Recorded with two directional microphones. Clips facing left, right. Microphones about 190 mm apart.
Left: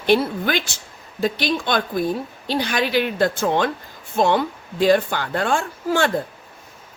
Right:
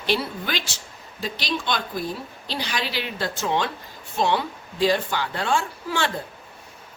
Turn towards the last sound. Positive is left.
turn(degrees=50)  # may be behind; listen again after turning